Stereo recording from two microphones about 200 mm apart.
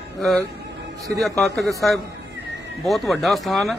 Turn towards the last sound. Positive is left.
turn(degrees=0)  # may be behind; listen again after turning